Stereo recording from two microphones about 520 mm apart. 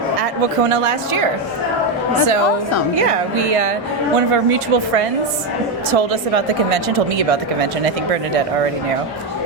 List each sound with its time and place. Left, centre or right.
0.2 s a woman's voice: right
3.0 s speech: right
4.3 s a woman's voice: right